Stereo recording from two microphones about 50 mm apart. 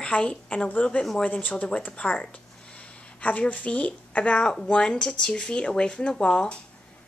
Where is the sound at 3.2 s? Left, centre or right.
Left.